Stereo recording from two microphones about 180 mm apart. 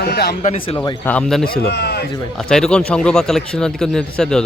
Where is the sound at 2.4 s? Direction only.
5° left (ahead or behind).